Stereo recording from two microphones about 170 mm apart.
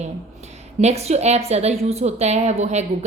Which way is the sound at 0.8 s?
40° right (ahead or behind).